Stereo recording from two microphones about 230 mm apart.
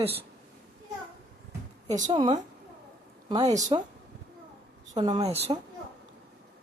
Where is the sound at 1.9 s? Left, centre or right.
Right.